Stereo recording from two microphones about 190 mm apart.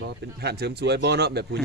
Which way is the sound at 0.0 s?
60° right (ahead or behind).